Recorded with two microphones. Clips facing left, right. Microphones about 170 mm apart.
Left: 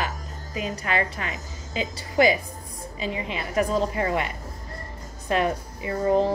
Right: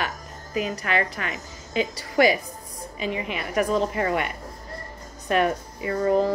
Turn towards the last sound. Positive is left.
turn(degrees=25)  # may be behind; listen again after turning